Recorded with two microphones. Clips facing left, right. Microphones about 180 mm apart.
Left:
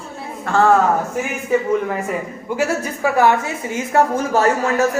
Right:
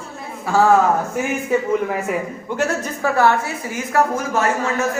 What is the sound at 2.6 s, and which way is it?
A woman's voice, 15° left (ahead or behind).